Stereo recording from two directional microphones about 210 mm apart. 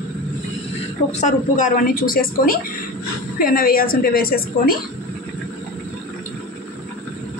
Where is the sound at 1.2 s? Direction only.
40° left (ahead or behind).